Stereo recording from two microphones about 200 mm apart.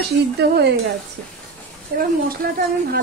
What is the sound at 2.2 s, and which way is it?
Speech, 45° right (ahead or behind).